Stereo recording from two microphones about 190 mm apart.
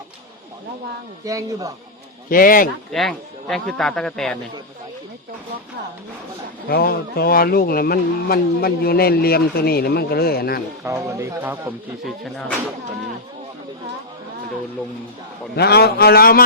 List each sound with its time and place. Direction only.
1.2 s speech: 15° right (ahead or behind)
2.3 s speech: 45° left (ahead or behind)
2.9 s speech: 5° left (ahead or behind)
6.7 s speech: 55° left (ahead or behind)
10.8 s speech: 15° right (ahead or behind)
12.2 s speech: centre (ahead or behind)
15.5 s speech: 55° left (ahead or behind)